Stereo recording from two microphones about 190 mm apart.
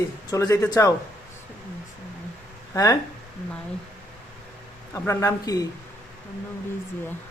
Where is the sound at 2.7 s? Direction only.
15° left (ahead or behind).